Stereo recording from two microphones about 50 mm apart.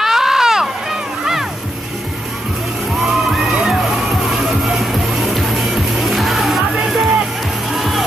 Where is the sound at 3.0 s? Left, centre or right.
Centre.